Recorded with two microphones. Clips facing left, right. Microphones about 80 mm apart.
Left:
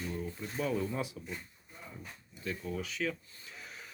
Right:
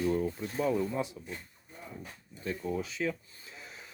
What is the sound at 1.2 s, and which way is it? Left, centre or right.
Speech, centre.